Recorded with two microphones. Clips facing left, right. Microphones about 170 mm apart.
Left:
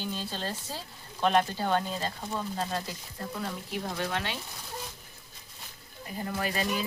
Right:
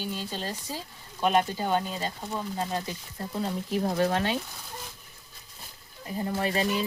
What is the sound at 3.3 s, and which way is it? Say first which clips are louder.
Speech: right 7 dB; 35° right (ahead or behind).